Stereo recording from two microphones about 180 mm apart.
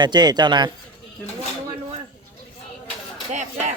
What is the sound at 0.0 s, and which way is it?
Speech, 25° right (ahead or behind).